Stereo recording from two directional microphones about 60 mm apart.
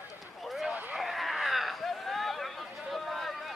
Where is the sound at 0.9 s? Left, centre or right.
Centre.